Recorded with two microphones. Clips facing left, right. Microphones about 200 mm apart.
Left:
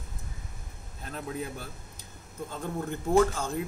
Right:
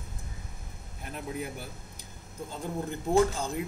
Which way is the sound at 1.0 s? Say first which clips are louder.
Left 1 dB; 10° right (ahead or behind).